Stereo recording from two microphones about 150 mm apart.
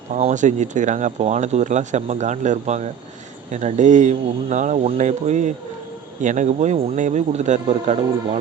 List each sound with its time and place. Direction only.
0.1 s speech: 50° right (ahead or behind)